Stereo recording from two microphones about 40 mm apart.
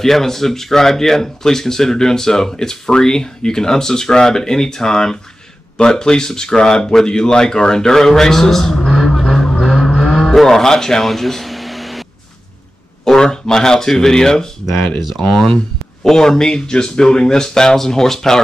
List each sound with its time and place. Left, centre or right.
0.0 s speech: centre
8.9 s a sound: centre
9.2 s vehicle: centre
9.9 s vehicle: centre
10.2 s music: centre
13.0 s speech: centre